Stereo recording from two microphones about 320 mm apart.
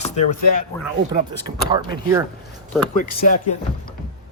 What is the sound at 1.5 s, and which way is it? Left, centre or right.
Speech, centre.